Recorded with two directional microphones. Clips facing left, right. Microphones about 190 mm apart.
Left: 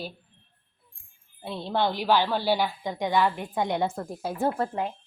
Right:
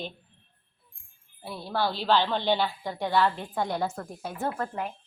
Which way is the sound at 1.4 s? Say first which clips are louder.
Left 3 dB; 25° left (ahead or behind).